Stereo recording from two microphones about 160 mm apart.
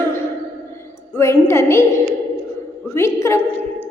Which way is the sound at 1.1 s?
15° left (ahead or behind).